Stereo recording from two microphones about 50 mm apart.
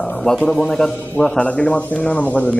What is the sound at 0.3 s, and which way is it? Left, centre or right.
Speech, centre.